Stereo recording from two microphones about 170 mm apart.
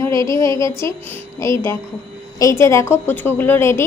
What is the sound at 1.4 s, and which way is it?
A woman's voice, 15° left (ahead or behind).